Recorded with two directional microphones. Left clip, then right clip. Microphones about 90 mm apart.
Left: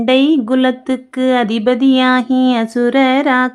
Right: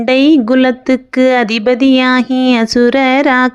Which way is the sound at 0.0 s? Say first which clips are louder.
Right 3 dB; 30° right (ahead or behind).